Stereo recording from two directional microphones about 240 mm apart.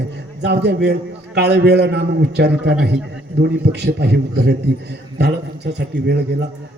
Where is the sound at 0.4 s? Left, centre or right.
Right.